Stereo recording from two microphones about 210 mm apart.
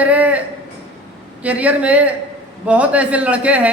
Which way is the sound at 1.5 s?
5° right (ahead or behind).